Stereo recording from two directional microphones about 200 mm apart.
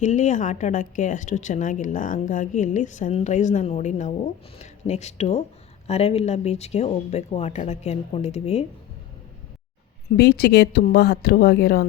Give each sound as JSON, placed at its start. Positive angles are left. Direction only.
{"t": 0.0, "sound": "a woman's voice", "side_deg": 35}
{"t": 10.2, "sound": "speech", "side_deg": 55}